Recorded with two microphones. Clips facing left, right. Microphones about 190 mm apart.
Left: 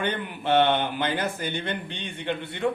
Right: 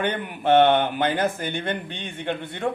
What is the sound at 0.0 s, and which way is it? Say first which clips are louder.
Speech: right 3 dB; 50° right (ahead or behind).